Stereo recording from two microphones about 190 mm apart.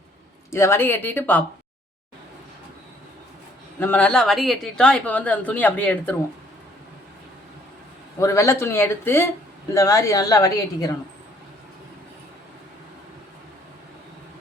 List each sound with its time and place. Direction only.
0.5 s speech: 15° left (ahead or behind)
3.8 s speech: 10° left (ahead or behind)
8.2 s a woman's voice: 15° left (ahead or behind)